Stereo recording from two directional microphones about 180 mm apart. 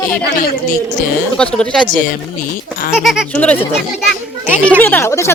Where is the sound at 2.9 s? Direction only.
Centre (ahead or behind).